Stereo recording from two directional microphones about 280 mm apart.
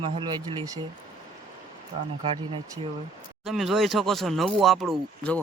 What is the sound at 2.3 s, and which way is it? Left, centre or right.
Speech, centre.